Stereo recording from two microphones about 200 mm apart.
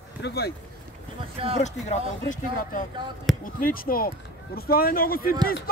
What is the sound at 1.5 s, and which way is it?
Speech, 35° left (ahead or behind).